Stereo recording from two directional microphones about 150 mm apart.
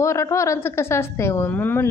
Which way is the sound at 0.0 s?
20° left (ahead or behind).